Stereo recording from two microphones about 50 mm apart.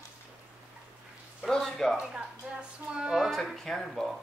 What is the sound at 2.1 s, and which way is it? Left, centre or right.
A woman's voice, centre.